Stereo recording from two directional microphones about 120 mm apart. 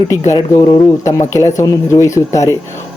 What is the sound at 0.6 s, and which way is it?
Speech, 30° left (ahead or behind).